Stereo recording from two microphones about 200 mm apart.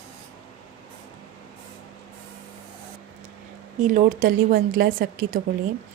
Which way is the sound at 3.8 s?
40° right (ahead or behind).